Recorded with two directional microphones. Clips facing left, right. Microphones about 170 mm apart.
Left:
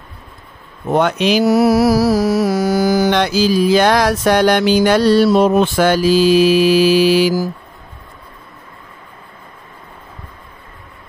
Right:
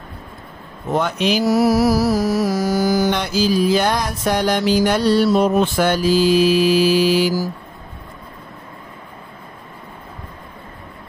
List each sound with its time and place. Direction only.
0.9 s mantra: 80° left